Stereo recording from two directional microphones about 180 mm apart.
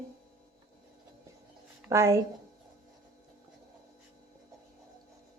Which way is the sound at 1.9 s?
15° right (ahead or behind).